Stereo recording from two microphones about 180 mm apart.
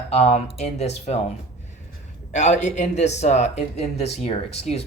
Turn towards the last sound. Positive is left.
turn(degrees=35)  # may be behind; listen again after turning